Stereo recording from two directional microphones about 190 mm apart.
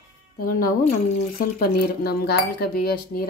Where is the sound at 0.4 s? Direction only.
50° left (ahead or behind).